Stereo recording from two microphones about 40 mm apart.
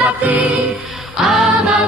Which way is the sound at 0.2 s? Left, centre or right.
Right.